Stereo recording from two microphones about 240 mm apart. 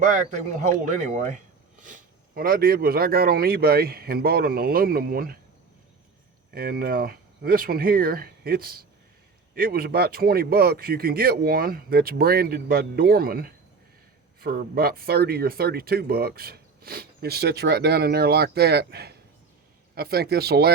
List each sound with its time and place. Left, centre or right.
1.1 s speech: right
6.5 s speech: right